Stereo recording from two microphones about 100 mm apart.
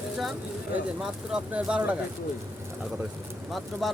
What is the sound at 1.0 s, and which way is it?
Speech, 10° right (ahead or behind).